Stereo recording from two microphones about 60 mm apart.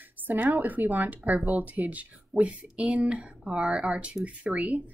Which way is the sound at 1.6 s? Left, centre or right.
Right.